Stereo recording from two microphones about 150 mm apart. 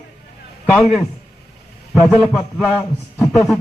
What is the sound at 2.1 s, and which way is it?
Speech, 5° right (ahead or behind).